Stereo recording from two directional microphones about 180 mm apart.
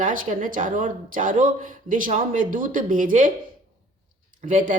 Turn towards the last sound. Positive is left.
turn(degrees=-45)  # may be behind; listen again after turning